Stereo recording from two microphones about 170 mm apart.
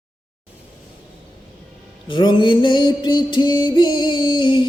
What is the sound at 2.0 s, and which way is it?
Music, 30° left (ahead or behind).